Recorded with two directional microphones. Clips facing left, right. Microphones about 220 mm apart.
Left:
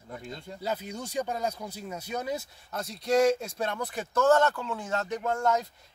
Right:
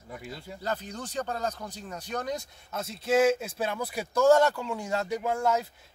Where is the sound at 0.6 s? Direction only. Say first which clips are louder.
Left 1 dB; 10° left (ahead or behind).